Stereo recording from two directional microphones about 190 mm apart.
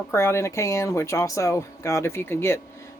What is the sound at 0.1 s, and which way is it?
Speech, 15° left (ahead or behind).